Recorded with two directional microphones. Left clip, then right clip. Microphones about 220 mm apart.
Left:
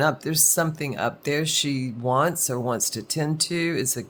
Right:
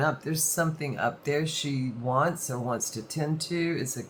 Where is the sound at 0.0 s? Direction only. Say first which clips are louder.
Left 6 dB; 50° left (ahead or behind).